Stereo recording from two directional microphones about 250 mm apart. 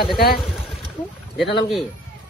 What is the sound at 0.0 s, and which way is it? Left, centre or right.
Speech, left.